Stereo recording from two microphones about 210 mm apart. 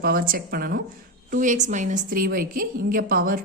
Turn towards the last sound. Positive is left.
turn(degrees=-40)  # may be behind; listen again after turning